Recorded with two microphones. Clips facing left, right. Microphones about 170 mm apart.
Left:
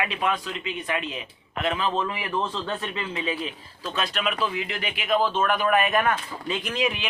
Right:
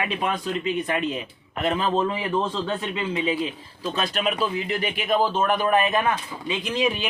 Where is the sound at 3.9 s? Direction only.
40° right (ahead or behind); by 6.9 s 20° right (ahead or behind).